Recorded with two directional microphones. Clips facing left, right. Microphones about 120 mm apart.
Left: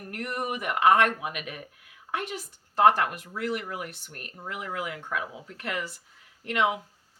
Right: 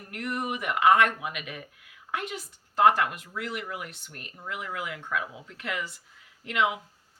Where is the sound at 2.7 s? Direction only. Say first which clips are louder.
Left 1 dB; 40° left (ahead or behind).